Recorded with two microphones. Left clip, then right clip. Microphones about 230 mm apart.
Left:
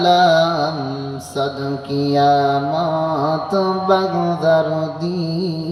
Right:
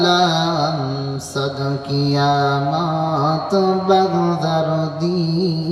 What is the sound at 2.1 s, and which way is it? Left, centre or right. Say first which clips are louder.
Mantra: left 3 dB; left.